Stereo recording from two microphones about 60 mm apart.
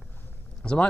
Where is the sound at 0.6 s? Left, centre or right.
Centre.